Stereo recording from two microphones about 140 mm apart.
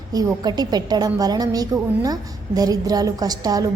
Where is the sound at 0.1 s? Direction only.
25° right (ahead or behind).